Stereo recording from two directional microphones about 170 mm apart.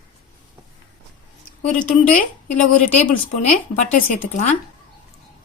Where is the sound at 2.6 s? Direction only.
45° left (ahead or behind).